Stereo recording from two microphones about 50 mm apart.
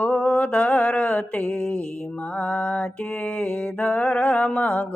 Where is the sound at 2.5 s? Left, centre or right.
Left.